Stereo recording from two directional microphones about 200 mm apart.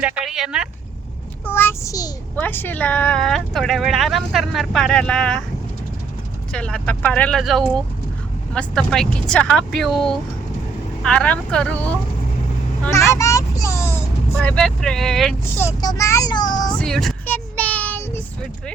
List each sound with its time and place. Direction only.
0.0 s speech: centre (ahead or behind)
1.5 s a child's voice: 10° left (ahead or behind)
6.5 s a child's voice: 5° left (ahead or behind)
15.8 s speech: 15° left (ahead or behind)
16.8 s child singing: centre (ahead or behind)